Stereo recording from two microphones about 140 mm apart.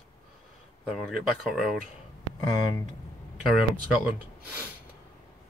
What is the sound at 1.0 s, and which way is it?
Speech, 5° right (ahead or behind).